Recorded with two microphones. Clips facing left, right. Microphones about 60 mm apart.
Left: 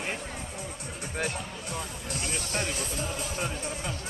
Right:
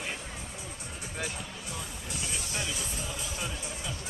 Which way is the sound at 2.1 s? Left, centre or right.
Left.